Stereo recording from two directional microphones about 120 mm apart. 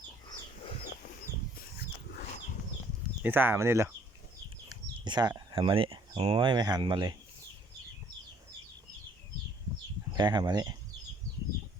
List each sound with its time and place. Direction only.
3.2 s speech: 15° right (ahead or behind)
4.7 s bird: 35° right (ahead or behind)
5.5 s speech: 45° right (ahead or behind)
10.2 s speech: 35° right (ahead or behind)